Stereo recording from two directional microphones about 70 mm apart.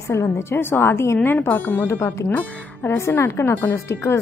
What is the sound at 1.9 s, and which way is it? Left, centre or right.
Speech, left.